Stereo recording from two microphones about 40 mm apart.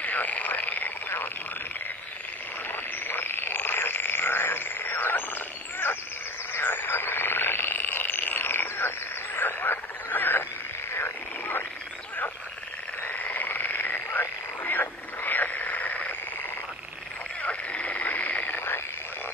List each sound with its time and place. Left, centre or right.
0.0 s frog: left
2.7 s frog: left
7.7 s frog: left
13.0 s frog: left
17.4 s frog: left